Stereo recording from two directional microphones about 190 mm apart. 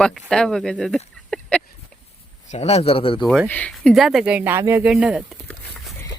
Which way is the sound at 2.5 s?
35° left (ahead or behind).